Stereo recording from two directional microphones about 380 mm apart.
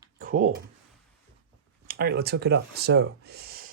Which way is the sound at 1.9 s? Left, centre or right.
Right.